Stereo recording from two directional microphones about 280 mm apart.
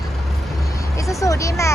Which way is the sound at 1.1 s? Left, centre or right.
Centre.